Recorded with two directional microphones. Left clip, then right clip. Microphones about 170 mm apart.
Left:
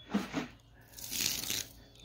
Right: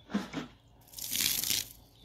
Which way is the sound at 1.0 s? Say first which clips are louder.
Right 3 dB; 40° right (ahead or behind).